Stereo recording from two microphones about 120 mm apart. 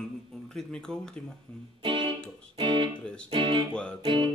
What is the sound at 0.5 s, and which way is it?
Speech, 5° left (ahead or behind).